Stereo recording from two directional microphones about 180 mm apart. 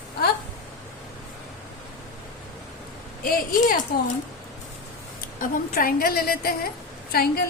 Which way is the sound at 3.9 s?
55° left (ahead or behind).